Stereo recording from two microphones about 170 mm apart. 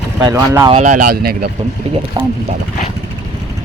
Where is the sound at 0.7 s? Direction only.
45° right (ahead or behind).